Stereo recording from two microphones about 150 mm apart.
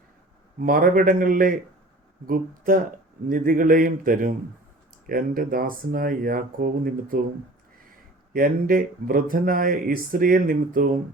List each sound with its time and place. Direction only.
0.6 s speech: 70° right (ahead or behind)
8.3 s speech: 70° right (ahead or behind)